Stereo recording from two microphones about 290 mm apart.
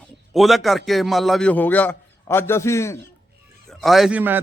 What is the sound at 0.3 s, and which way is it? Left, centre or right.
A man's voice, centre.